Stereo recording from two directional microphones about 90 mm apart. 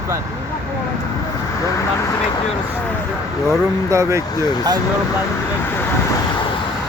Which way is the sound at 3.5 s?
35° right (ahead or behind).